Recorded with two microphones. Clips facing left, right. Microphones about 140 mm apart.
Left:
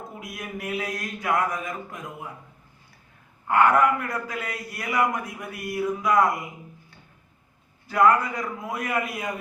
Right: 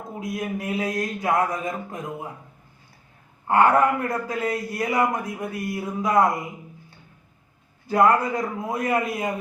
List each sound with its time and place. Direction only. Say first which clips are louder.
0.2 s a man's voice: right 9 dB; 25° right (ahead or behind)
3.4 s a man's voice: right 2 dB; 30° right (ahead or behind)
7.9 s a man's voice: right 1 dB; 25° right (ahead or behind)